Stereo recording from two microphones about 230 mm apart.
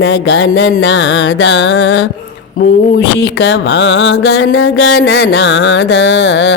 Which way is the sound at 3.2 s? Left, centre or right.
Left.